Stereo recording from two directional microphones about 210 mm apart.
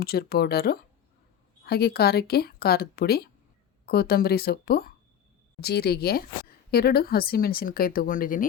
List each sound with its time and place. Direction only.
0.0 s speech: 45° left (ahead or behind)